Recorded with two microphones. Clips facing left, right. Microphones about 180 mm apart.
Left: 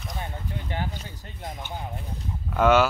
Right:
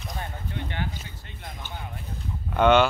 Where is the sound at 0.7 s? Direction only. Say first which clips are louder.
Left 1 dB; 40° left (ahead or behind).